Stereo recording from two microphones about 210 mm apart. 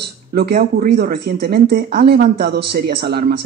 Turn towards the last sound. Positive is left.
turn(degrees=-50)  # may be behind; listen again after turning